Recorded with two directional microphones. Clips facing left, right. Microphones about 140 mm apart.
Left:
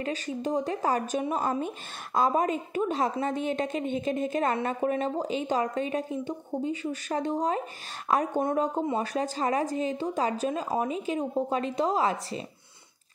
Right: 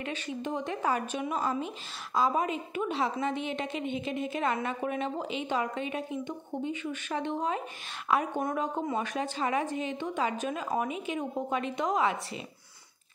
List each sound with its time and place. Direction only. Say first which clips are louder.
0.0 s a woman's voice: left 4 dB; 35° left (ahead or behind)
8.4 s a woman's voice: left 4 dB; 25° left (ahead or behind)